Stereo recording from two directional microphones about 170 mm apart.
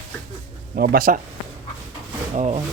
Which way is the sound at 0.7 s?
55° right (ahead or behind).